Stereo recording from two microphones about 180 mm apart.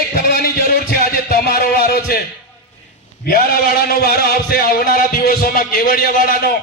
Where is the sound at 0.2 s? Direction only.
55° left (ahead or behind).